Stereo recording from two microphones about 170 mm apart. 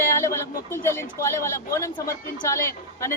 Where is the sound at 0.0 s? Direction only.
15° left (ahead or behind).